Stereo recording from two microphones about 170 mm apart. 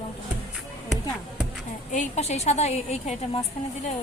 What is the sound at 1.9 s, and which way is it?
A woman's voice, 45° left (ahead or behind).